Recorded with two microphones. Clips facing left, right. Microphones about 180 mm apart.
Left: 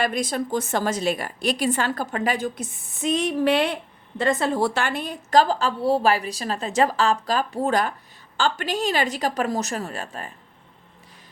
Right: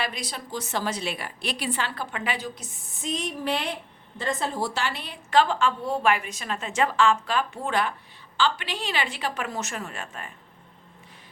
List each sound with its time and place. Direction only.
0.0 s a woman's voice: 50° left (ahead or behind)